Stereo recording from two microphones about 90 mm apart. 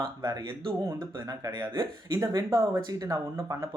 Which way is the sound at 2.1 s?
40° right (ahead or behind).